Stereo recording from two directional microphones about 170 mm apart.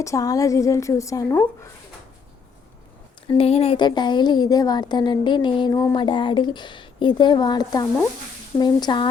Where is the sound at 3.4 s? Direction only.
35° left (ahead or behind).